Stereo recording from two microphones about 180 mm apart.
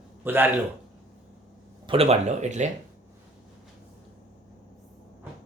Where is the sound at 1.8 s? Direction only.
35° right (ahead or behind).